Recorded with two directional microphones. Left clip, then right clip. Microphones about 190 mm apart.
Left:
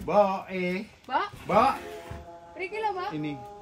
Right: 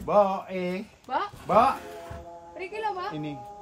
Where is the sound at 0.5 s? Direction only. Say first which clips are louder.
Even; centre (ahead or behind).